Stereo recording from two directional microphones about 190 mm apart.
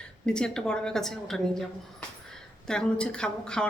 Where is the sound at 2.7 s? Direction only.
5° left (ahead or behind).